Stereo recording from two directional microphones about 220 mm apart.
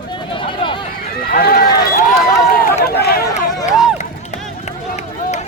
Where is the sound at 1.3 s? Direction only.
40° left (ahead or behind).